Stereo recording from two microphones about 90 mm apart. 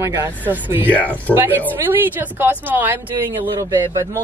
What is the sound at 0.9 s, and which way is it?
Speech, 15° left (ahead or behind).